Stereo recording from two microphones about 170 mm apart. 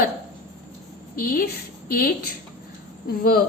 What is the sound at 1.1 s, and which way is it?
Speech, 60° left (ahead or behind).